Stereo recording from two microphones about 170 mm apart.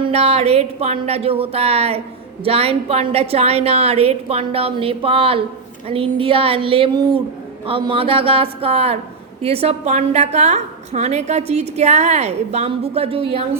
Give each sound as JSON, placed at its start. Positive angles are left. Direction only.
{"t": 0.0, "sound": "a woman's voice", "side_deg": -35}